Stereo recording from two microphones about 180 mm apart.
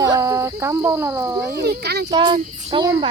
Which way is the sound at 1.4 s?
60° right (ahead or behind).